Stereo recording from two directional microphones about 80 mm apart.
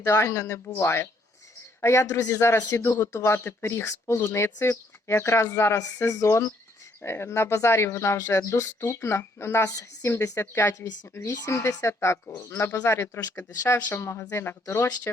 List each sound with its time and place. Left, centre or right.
0.0 s speech: left